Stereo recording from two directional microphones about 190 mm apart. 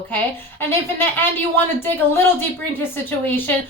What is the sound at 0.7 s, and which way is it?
A woman's voice, 10° left (ahead or behind).